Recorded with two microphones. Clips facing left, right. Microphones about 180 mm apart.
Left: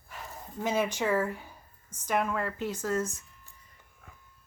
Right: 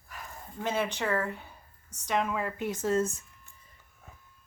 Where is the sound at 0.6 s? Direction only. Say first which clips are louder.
Left 2 dB; 10° left (ahead or behind).